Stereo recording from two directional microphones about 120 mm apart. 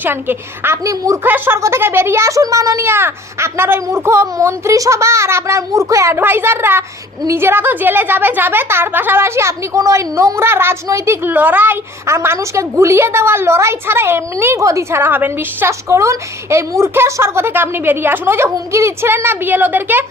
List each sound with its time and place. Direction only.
0.0 s a woman's voice: 15° right (ahead or behind)